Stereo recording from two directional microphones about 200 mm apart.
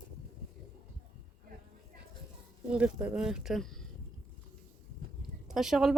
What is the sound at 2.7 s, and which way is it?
Speech, 5° right (ahead or behind).